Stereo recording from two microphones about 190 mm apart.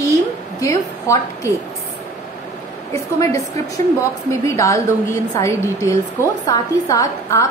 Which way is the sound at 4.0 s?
15° left (ahead or behind).